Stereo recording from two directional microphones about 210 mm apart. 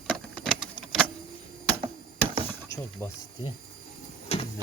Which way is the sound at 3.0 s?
10° left (ahead or behind).